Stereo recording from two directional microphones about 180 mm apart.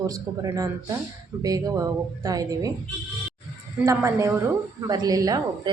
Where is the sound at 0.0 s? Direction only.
20° right (ahead or behind).